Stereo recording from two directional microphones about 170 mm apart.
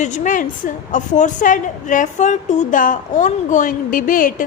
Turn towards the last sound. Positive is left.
turn(degrees=55)  # may be behind; listen again after turning